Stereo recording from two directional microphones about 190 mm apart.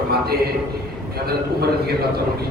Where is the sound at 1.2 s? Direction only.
55° right (ahead or behind).